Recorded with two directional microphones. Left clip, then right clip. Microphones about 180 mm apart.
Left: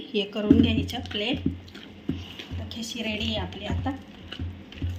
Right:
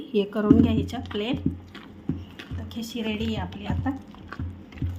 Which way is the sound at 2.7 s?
60° right (ahead or behind).